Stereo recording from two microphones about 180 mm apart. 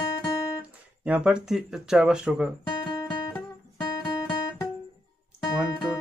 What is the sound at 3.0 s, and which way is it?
Music, 15° left (ahead or behind).